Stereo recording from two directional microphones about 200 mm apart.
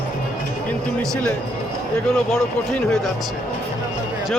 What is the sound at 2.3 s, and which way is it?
Speech, centre (ahead or behind).